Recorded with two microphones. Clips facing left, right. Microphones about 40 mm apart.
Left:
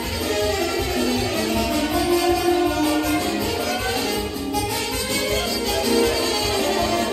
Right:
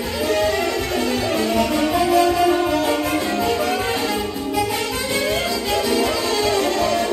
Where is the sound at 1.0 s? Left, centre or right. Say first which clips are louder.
Right 2 dB; right.